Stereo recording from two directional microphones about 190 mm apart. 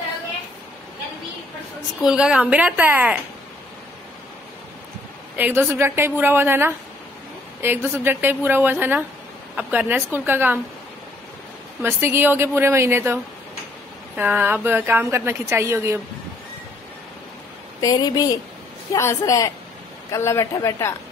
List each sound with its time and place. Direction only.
2.0 s a woman's voice: 5° right (ahead or behind)
5.4 s a woman's voice: 10° right (ahead or behind)
11.8 s a woman's voice: 10° right (ahead or behind)
17.7 s a woman's voice: 20° left (ahead or behind)